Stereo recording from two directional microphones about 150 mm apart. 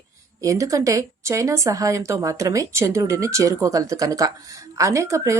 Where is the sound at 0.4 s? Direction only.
20° right (ahead or behind).